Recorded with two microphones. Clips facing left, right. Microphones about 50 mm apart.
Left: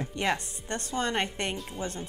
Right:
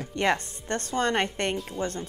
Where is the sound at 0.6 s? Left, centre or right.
Right.